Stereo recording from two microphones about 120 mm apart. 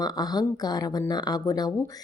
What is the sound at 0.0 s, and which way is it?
Speech, 35° left (ahead or behind).